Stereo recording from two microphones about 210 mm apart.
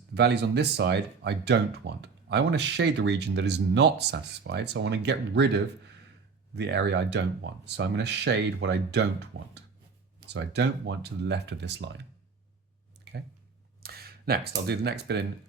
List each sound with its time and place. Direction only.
0.1 s speech: 55° right (ahead or behind)
13.1 s a sound: 50° right (ahead or behind)
13.8 s speech: 50° right (ahead or behind)